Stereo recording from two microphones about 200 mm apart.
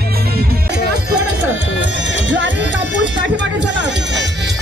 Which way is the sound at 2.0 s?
65° right (ahead or behind).